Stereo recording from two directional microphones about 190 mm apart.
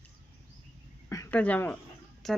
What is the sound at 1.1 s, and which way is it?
A woman's voice, 10° left (ahead or behind).